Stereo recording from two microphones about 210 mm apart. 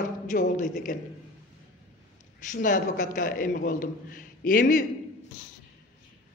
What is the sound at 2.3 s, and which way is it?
A man's voice, 40° left (ahead or behind).